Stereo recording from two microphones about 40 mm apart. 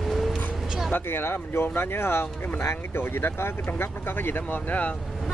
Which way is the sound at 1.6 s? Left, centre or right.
Left.